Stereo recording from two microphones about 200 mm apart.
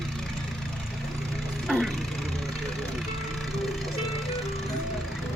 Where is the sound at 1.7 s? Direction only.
Centre (ahead or behind).